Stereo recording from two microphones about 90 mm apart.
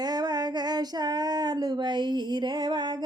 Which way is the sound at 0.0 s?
50° right (ahead or behind).